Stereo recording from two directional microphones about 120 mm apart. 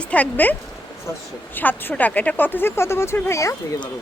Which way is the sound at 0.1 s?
15° left (ahead or behind).